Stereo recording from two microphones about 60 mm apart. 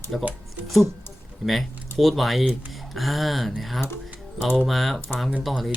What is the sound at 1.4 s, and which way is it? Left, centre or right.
Speech, centre.